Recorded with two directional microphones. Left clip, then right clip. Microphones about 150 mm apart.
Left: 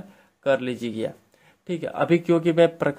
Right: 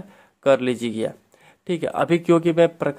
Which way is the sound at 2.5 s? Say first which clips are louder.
Right 1 dB; 10° right (ahead or behind).